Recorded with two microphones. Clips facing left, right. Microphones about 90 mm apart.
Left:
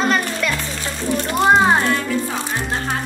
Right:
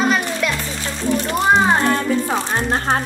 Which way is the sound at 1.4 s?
Centre (ahead or behind).